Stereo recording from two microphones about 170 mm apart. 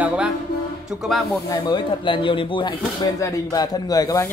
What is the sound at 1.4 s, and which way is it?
Speech, 25° left (ahead or behind).